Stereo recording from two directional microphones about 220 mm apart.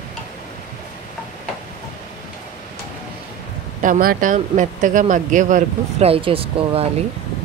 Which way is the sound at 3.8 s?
40° right (ahead or behind).